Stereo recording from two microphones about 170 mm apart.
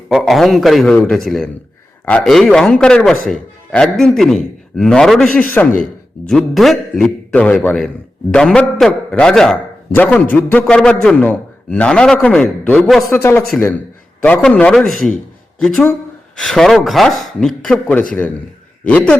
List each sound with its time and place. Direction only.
0.1 s a man's voice: centre (ahead or behind)
13.1 s a man's voice: 15° left (ahead or behind)